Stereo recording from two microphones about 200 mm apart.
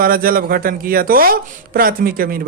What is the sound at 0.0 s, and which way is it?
Speech, 45° right (ahead or behind).